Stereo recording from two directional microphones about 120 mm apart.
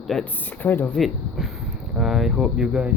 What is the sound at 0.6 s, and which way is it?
Speech, 15° left (ahead or behind).